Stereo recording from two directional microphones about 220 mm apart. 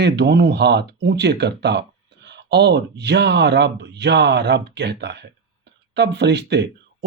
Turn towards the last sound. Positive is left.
turn(degrees=-50)  # may be behind; listen again after turning